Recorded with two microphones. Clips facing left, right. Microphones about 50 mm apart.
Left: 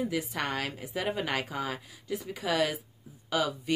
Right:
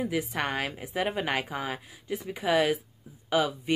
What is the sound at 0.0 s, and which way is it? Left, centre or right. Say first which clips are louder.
Speech: right 2 dB; right.